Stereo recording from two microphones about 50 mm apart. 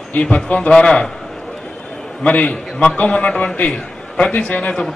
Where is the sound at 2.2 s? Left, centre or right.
Left.